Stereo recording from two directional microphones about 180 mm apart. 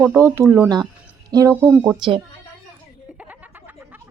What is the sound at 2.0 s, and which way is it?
Speech, 25° right (ahead or behind).